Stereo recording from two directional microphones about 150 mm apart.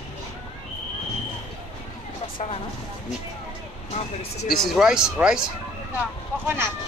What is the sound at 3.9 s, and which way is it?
Speech, 45° left (ahead or behind).